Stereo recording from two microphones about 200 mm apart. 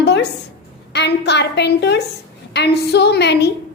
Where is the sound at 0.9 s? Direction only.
60° left (ahead or behind).